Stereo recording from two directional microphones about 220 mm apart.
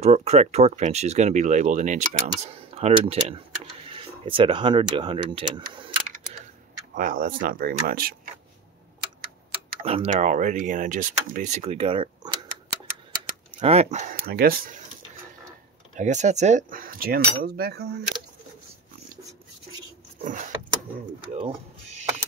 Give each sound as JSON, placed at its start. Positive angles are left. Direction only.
{"t": 0.0, "sound": "speech", "side_deg": -30}
{"t": 7.0, "sound": "speech", "side_deg": -40}
{"t": 9.8, "sound": "speech", "side_deg": -30}
{"t": 13.1, "sound": "speech", "side_deg": -35}
{"t": 15.9, "sound": "speech", "side_deg": -35}
{"t": 20.2, "sound": "keys jangling", "side_deg": -35}
{"t": 21.3, "sound": "a sound", "side_deg": -25}